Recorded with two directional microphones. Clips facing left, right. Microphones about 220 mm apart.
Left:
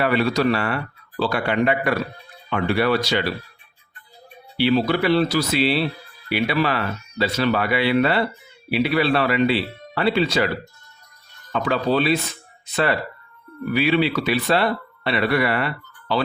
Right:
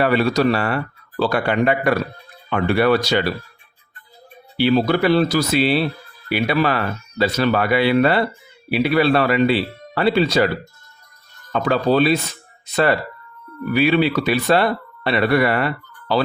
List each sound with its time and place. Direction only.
0.0 s speech: 40° right (ahead or behind)
4.5 s speech: 45° right (ahead or behind)
11.5 s speech: 40° right (ahead or behind)
13.7 s speech: 45° right (ahead or behind)